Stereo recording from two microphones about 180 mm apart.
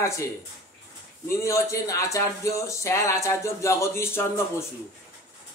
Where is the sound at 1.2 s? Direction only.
15° left (ahead or behind).